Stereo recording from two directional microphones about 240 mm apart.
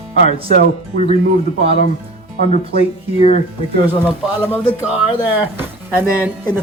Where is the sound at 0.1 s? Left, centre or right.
Left.